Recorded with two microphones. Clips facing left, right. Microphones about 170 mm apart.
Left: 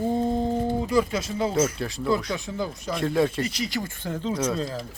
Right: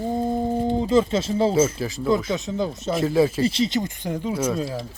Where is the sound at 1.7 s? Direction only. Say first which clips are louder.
Right 3 dB; centre (ahead or behind).